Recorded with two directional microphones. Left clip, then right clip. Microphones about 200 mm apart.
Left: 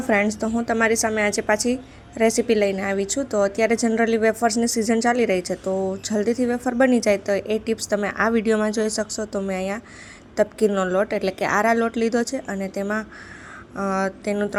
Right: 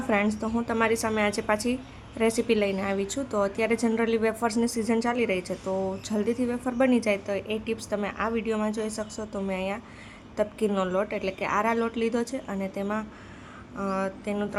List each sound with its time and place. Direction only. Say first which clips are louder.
0.3 s a woman's voice: left 5 dB; 15° left (ahead or behind)